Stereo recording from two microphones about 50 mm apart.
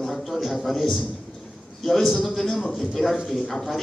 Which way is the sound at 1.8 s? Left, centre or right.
Centre.